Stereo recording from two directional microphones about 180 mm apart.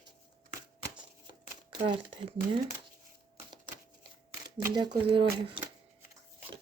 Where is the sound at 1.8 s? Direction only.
25° right (ahead or behind).